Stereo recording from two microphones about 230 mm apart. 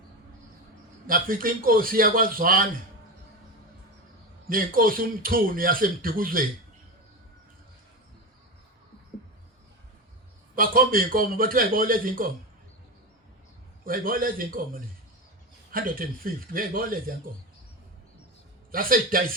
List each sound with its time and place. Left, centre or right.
1.0 s speech: right
4.4 s speech: right
10.5 s speech: right
13.8 s speech: right
18.7 s speech: right